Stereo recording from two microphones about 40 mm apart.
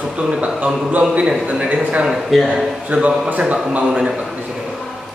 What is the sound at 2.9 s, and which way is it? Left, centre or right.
Speech, right.